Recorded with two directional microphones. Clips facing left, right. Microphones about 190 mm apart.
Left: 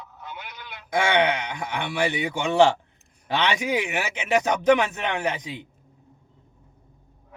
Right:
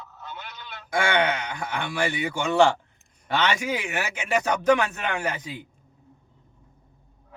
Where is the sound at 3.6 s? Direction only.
20° left (ahead or behind).